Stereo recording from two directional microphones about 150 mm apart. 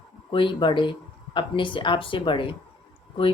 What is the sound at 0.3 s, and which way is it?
Speech, 35° left (ahead or behind).